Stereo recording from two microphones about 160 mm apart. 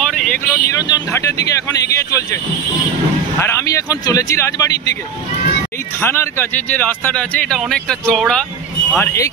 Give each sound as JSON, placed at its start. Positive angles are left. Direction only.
{"t": 0.0, "sound": "vehicle", "side_deg": 5}
{"t": 0.5, "sound": "speech", "side_deg": 25}
{"t": 3.3, "sound": "speech", "side_deg": 15}
{"t": 5.9, "sound": "speech", "side_deg": 15}
{"t": 8.9, "sound": "speech", "side_deg": 15}